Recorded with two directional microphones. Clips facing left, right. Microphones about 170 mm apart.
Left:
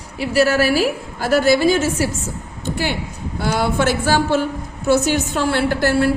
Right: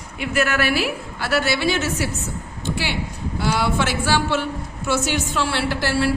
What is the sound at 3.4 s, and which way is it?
A woman's voice, 50° left (ahead or behind).